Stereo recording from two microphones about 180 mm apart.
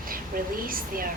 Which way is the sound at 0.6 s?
50° right (ahead or behind).